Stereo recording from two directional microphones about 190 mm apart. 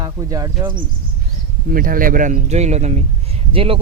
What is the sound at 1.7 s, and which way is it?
Speech, 50° right (ahead or behind).